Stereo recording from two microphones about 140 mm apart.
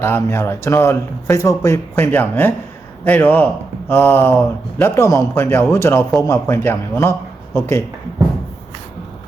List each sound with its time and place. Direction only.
0.0 s a man's voice: 15° left (ahead or behind)